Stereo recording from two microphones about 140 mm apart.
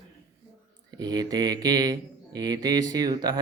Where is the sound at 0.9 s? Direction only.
30° right (ahead or behind).